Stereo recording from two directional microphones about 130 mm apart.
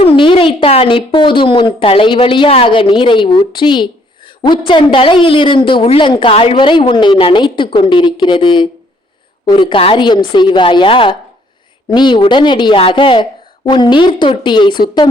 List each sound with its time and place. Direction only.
0.0 s a woman's voice: 45° left (ahead or behind)